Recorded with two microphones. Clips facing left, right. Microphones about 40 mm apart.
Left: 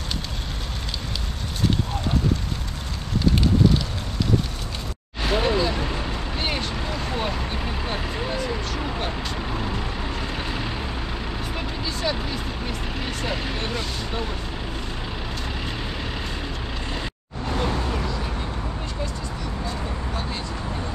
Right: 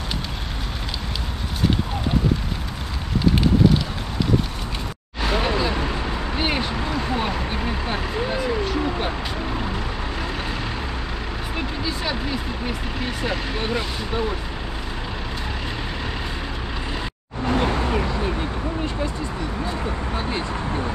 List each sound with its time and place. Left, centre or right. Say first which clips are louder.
3.3 s fire: right 2 dB; centre
5.2 s vehicle: even; centre
11.5 s vehicle: right 3 dB; centre
17.5 s vehicle: right 4 dB; right
20.2 s vehicle: right 5 dB; right